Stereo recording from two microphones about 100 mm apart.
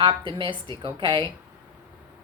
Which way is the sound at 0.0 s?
55° right (ahead or behind).